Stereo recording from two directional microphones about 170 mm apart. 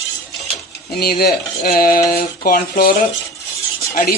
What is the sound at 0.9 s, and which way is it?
Speech, 60° left (ahead or behind).